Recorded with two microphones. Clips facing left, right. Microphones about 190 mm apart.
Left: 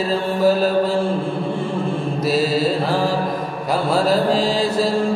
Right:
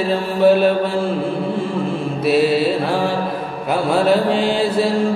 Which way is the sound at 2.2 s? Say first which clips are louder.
Right 4 dB; 65° right (ahead or behind).